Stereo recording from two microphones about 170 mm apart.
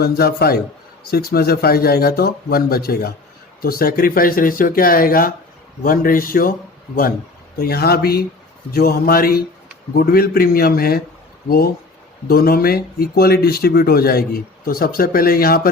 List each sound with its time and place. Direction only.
0.0 s speech: 65° left (ahead or behind)
7.6 s speech: 65° left (ahead or behind)